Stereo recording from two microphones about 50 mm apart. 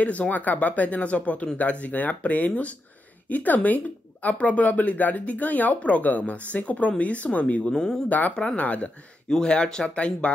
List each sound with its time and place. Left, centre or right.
0.0 s speech: left
9.3 s speech: centre